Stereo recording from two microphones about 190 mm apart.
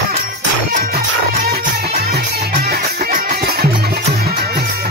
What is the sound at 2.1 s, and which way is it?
Music, 55° right (ahead or behind).